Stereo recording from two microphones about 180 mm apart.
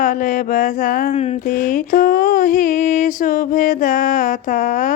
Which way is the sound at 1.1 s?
35° left (ahead or behind).